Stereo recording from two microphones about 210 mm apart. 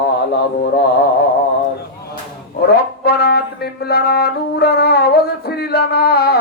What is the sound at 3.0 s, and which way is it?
Music, 45° left (ahead or behind).